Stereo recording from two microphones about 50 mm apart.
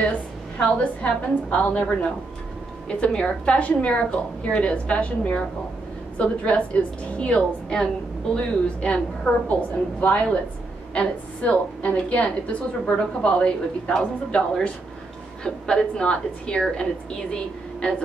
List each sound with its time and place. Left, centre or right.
0.6 s a woman's voice: left
15.4 s a woman's voice: centre